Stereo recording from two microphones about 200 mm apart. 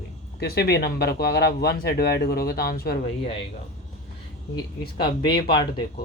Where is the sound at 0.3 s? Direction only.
50° left (ahead or behind).